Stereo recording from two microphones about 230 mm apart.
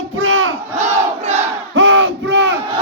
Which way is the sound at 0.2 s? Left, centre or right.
Right.